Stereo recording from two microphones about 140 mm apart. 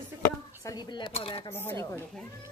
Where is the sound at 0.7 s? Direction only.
30° left (ahead or behind).